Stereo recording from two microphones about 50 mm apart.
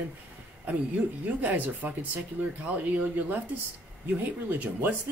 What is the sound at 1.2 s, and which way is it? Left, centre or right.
Speech, right.